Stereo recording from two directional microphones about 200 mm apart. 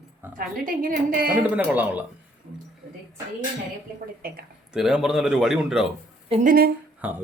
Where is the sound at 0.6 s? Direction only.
45° right (ahead or behind).